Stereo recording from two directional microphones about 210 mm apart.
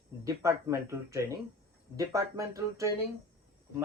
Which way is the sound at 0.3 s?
15° right (ahead or behind).